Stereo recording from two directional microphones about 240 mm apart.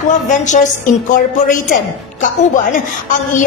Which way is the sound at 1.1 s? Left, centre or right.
Left.